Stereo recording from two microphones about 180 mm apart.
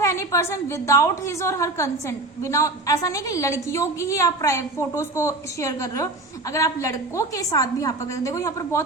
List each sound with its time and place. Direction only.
0.0 s a woman's voice: 15° left (ahead or behind)